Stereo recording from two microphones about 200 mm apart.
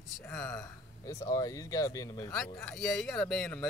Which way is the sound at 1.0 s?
15° left (ahead or behind).